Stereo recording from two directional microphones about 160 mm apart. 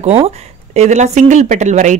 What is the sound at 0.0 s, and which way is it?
Speech, 40° right (ahead or behind).